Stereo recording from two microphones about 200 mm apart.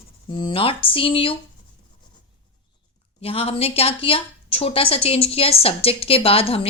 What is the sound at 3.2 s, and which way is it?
A woman's voice, 30° left (ahead or behind).